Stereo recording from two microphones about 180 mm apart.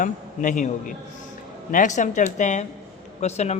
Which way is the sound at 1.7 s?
45° left (ahead or behind).